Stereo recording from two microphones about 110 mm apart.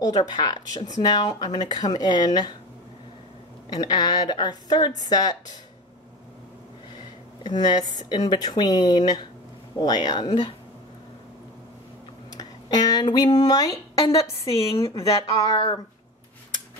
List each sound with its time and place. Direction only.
0.0 s speech: 40° left (ahead or behind)
3.7 s speech: 40° left (ahead or behind)
7.4 s speech: 40° left (ahead or behind)
12.3 s speech: 35° left (ahead or behind)
14.6 s a woman's voice: 55° left (ahead or behind)
15.0 s speech: 35° left (ahead or behind)